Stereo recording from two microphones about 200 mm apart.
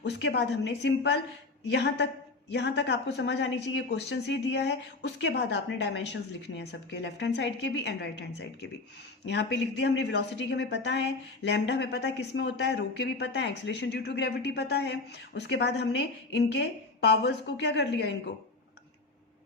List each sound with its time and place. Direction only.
0.0 s a woman's voice: 60° left (ahead or behind)